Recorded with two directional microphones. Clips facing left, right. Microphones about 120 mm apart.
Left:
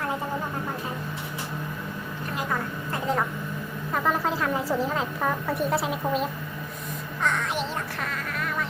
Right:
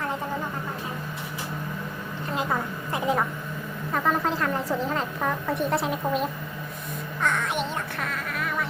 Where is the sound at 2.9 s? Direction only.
15° right (ahead or behind).